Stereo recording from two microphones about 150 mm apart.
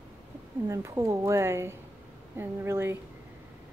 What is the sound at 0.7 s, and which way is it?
A woman's voice, 20° right (ahead or behind).